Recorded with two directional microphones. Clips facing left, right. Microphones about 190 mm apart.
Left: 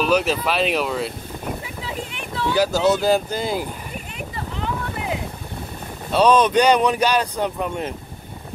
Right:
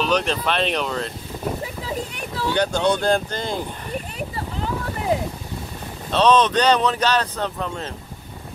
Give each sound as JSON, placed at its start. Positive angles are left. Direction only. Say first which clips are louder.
{"t": 0.0, "sound": "speech", "louder": "left 2 dB", "side_deg": 5}
{"t": 1.8, "sound": "a sound", "louder": "right 2 dB", "side_deg": -40}
{"t": 2.5, "sound": "speech", "louder": "left 2 dB", "side_deg": 5}
{"t": 6.1, "sound": "speech", "louder": "left 2 dB", "side_deg": 10}